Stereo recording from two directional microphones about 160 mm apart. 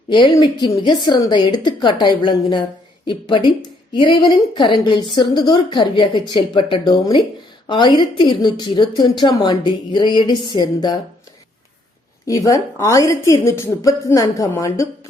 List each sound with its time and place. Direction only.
0.1 s a woman's voice: 30° left (ahead or behind)
12.2 s a woman's voice: 20° left (ahead or behind)